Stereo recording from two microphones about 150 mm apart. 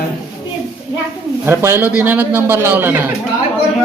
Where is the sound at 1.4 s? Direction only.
15° right (ahead or behind).